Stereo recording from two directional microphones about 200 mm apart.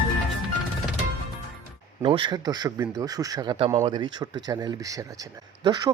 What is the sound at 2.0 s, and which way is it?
Speech, 25° right (ahead or behind).